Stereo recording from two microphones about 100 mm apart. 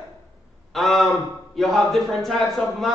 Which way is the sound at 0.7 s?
5° left (ahead or behind).